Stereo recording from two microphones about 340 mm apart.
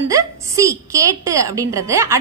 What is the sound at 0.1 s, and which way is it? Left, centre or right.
A woman's voice, centre.